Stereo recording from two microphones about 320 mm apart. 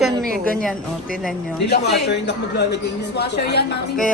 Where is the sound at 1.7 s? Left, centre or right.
Left.